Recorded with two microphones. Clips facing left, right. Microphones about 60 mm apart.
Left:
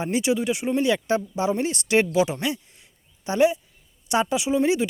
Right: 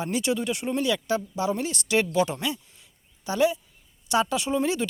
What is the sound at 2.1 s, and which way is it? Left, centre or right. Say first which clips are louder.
Speech: left 2 dB; centre.